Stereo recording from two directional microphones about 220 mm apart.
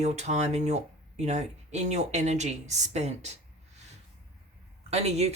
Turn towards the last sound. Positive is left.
turn(degrees=-30)  # may be behind; listen again after turning